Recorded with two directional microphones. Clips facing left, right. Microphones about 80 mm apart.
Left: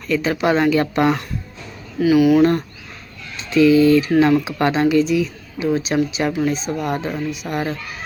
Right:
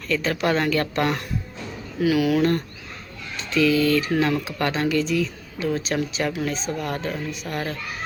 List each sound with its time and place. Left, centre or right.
0.1 s speech: centre
2.4 s speech: centre
3.3 s a sound: left
4.2 s speech: centre